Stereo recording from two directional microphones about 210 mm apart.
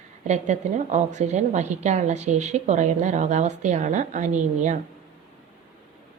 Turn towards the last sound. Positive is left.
turn(degrees=-35)  # may be behind; listen again after turning